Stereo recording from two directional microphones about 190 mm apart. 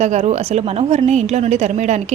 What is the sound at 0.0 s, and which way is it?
A woman's voice, 35° right (ahead or behind).